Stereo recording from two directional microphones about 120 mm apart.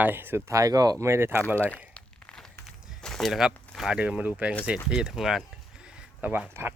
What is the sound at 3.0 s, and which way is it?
Speech, centre (ahead or behind).